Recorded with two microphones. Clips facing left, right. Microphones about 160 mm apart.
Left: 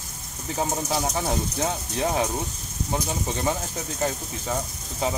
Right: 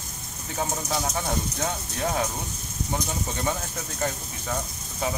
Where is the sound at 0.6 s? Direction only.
30° left (ahead or behind).